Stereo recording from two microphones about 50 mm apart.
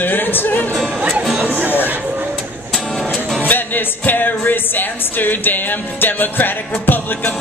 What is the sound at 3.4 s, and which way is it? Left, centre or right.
Music, left.